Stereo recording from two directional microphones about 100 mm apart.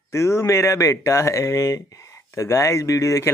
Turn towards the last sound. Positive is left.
turn(degrees=30)  # may be behind; listen again after turning